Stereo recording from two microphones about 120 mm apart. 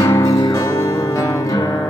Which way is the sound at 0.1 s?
25° left (ahead or behind).